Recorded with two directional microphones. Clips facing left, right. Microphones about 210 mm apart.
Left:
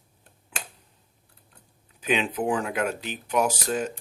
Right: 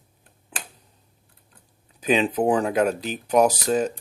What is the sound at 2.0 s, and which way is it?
Speech, 40° right (ahead or behind).